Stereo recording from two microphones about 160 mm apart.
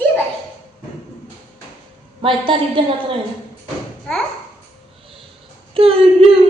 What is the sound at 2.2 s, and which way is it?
Speech, 35° right (ahead or behind).